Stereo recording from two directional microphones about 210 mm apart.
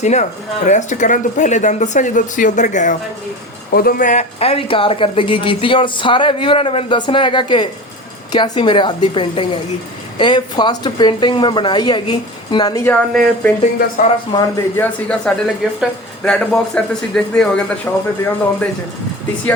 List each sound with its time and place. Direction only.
0.0 s speech: 35° left (ahead or behind); by 18.0 s 10° left (ahead or behind)